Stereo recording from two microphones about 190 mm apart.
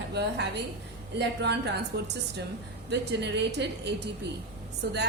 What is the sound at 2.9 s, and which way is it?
Speech, 65° right (ahead or behind).